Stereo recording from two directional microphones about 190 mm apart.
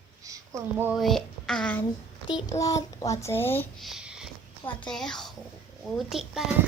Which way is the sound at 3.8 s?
Centre (ahead or behind).